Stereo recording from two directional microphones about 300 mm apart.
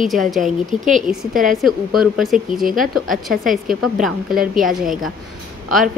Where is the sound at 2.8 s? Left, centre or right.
Centre.